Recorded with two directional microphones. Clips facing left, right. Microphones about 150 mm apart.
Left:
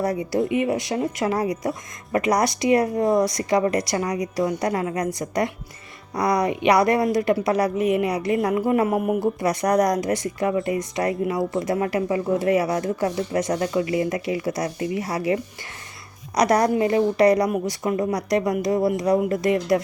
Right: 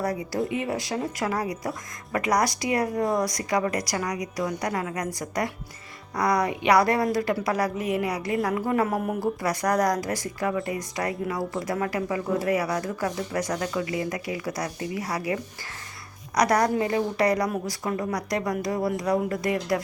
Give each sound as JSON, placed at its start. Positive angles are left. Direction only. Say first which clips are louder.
{"t": 0.0, "sound": "a woman's voice", "louder": "left 5 dB", "side_deg": 20}